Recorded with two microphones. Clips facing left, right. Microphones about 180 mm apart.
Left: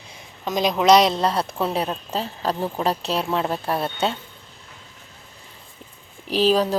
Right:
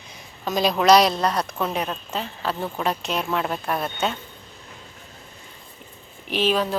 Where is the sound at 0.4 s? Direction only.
15° left (ahead or behind).